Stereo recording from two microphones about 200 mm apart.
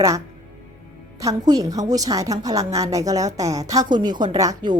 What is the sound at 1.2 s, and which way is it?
A woman's voice, 20° right (ahead or behind).